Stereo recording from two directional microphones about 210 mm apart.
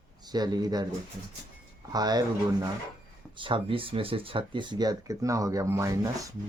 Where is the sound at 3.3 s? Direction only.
25° right (ahead or behind).